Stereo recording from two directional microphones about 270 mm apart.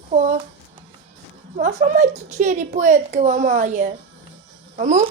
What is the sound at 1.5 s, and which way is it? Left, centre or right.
A child's voice, right.